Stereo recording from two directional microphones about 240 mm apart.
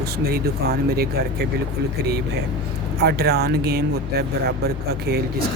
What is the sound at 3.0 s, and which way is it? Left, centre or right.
Speech, right.